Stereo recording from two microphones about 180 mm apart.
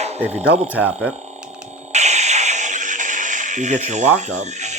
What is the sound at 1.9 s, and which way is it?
Music, 40° right (ahead or behind).